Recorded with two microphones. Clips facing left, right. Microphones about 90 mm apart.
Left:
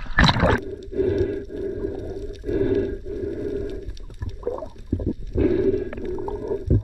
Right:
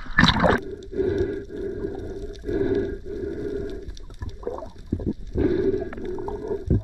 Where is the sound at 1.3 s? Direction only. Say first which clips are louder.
Left 2 dB; 25° right (ahead or behind).